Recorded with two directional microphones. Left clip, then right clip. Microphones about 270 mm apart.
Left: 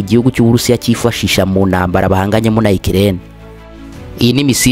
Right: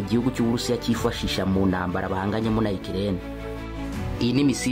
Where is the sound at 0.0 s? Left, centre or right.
Left.